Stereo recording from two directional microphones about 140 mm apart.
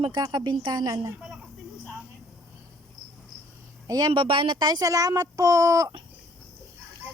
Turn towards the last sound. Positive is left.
turn(degrees=-25)  # may be behind; listen again after turning